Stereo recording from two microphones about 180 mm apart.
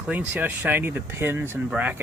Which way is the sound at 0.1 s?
10° right (ahead or behind).